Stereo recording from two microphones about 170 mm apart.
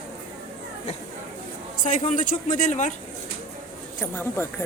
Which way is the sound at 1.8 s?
45° left (ahead or behind).